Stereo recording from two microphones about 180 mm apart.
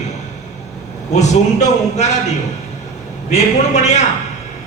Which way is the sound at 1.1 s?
40° left (ahead or behind).